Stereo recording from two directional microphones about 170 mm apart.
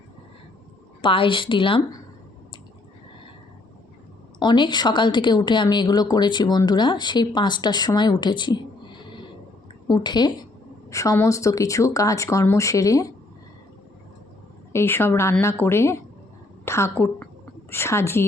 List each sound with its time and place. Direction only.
1.0 s speech: 30° left (ahead or behind)
4.4 s speech: 25° left (ahead or behind)
9.8 s speech: 25° left (ahead or behind)
14.7 s a woman's voice: 15° left (ahead or behind)